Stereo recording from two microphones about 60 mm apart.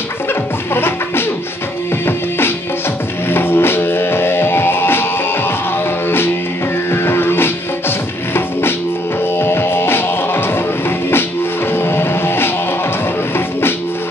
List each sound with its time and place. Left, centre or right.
0.3 s music: left
6.0 s music: left
9.4 s music: left
11.7 s music: left